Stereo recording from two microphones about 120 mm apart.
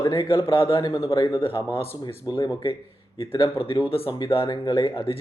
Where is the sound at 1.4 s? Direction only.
45° left (ahead or behind).